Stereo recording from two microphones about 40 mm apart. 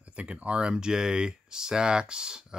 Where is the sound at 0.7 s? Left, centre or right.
Centre.